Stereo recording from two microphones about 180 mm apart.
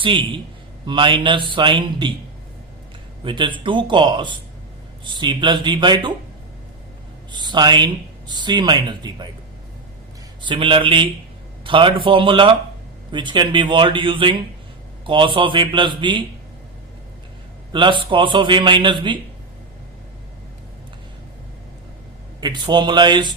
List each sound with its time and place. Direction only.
0.0 s speech: 25° right (ahead or behind)
3.2 s speech: 25° right (ahead or behind)
7.3 s speech: 25° right (ahead or behind)
10.4 s speech: 30° right (ahead or behind)
17.7 s a man's voice: 25° right (ahead or behind)
22.4 s speech: 25° right (ahead or behind)